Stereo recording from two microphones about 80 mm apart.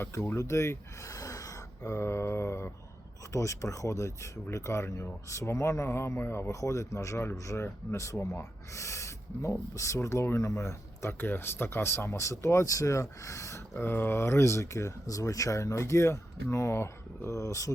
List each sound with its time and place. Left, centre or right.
0.0 s speech: left
11.2 s speech: left
13.7 s speech: left